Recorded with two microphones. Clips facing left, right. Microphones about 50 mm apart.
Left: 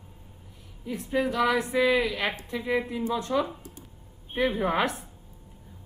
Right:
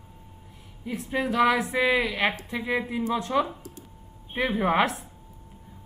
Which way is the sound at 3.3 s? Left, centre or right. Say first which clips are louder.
Right 2 dB; centre.